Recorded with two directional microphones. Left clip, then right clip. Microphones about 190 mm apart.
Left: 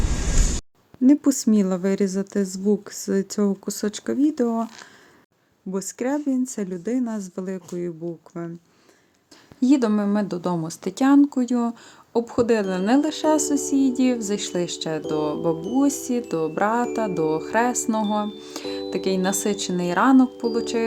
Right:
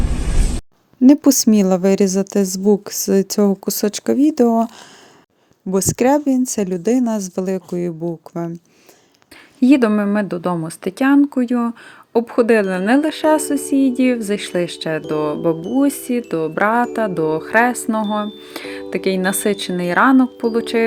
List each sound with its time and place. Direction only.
1.0 s a woman's voice: 25° right (ahead or behind)
5.7 s a woman's voice: 30° right (ahead or behind)
9.6 s speech: 20° right (ahead or behind)